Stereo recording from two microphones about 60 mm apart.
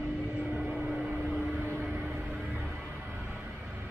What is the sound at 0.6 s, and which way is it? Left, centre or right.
Vehicle, centre.